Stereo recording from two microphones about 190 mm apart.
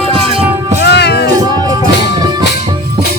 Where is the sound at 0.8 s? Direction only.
60° left (ahead or behind).